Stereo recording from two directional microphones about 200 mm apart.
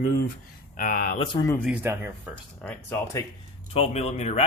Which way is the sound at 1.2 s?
20° left (ahead or behind).